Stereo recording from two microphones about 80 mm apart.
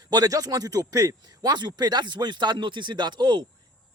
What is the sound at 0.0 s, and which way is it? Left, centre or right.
A man's voice, right.